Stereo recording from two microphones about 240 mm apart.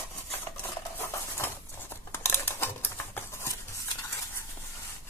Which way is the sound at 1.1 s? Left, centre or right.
Centre.